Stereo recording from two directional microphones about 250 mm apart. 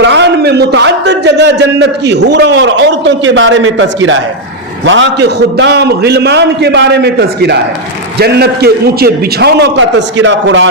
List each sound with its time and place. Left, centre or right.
0.0 s a man's voice: right